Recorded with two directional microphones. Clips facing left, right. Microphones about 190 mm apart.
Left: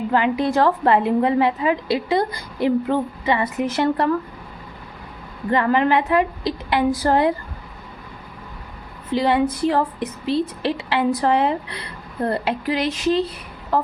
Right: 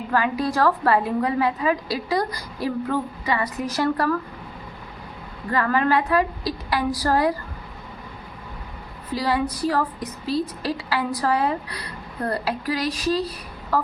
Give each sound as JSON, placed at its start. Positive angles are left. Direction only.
{"t": 0.1, "sound": "a woman's voice", "side_deg": 20}
{"t": 5.5, "sound": "a woman's voice", "side_deg": 20}
{"t": 9.1, "sound": "a woman's voice", "side_deg": 25}